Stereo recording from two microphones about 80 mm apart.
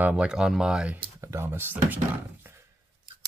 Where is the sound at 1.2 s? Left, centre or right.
Right.